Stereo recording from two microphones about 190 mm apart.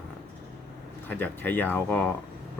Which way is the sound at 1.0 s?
10° left (ahead or behind).